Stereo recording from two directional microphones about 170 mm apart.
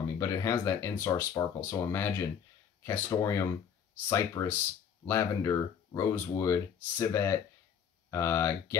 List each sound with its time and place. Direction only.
0.2 s speech: 20° left (ahead or behind)